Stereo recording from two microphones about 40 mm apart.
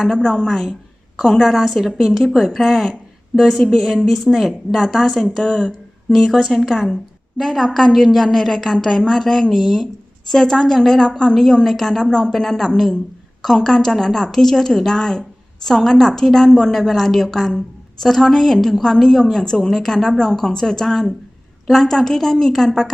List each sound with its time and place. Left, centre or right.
0.2 s a woman's voice: centre
1.5 s a woman's voice: centre
2.4 s a woman's voice: centre
3.3 s speech: left
3.8 s a woman's voice: centre
5.4 s a woman's voice: centre
6.1 s a woman's voice: centre
10.2 s a woman's voice: centre